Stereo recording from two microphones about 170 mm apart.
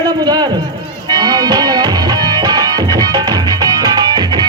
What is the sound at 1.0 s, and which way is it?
Music, 25° right (ahead or behind).